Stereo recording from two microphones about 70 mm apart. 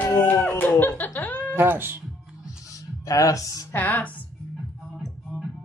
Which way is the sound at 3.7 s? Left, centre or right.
Left.